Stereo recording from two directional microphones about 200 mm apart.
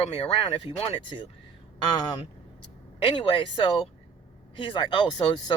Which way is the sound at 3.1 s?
25° left (ahead or behind).